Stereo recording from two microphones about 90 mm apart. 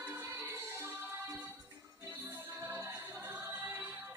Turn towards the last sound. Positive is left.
turn(degrees=-20)  # may be behind; listen again after turning